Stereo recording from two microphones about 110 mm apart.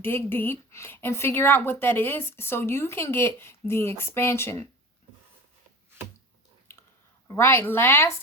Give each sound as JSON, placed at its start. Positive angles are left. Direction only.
{"t": 0.0, "sound": "a woman's voice", "side_deg": 20}
{"t": 7.3, "sound": "a woman's voice", "side_deg": 20}